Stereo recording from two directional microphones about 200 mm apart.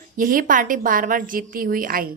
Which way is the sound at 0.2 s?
45° right (ahead or behind).